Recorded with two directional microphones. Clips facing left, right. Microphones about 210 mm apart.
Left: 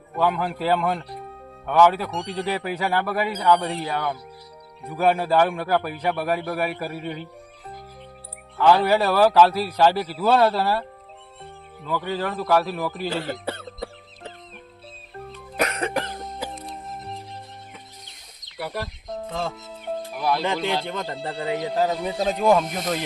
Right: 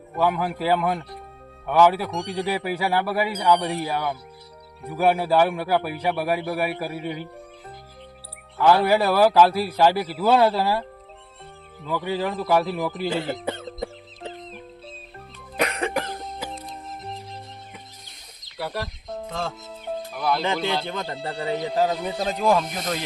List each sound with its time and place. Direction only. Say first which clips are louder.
0.2 s a man's voice: even; 10° right (ahead or behind)
8.5 s a man's voice: even; 10° right (ahead or behind)
11.9 s speech: right 1 dB; 15° right (ahead or behind)
15.6 s cough: even; 10° right (ahead or behind)
18.5 s music: even; centre (ahead or behind)
20.1 s speech: even; centre (ahead or behind)